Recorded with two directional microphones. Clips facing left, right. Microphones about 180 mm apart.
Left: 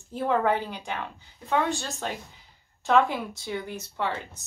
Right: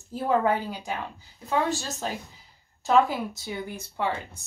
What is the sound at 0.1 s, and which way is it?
Speech, 40° right (ahead or behind).